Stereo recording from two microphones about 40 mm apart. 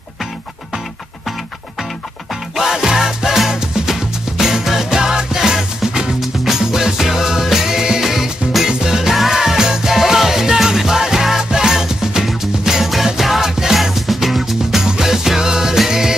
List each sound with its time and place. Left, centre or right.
2.5 s music: centre